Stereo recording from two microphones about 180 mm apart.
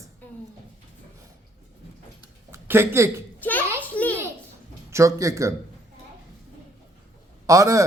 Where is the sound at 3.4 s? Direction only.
10° left (ahead or behind).